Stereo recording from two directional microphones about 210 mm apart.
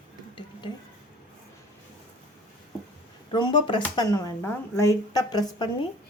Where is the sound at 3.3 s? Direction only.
20° left (ahead or behind).